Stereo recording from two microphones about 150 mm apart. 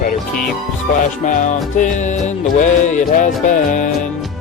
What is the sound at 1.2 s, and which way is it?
Music, 55° left (ahead or behind).